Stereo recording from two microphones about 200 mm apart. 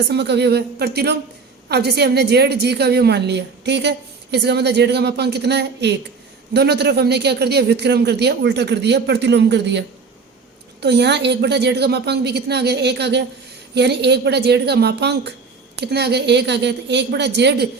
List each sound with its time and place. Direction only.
0.1 s a woman's voice: 55° right (ahead or behind)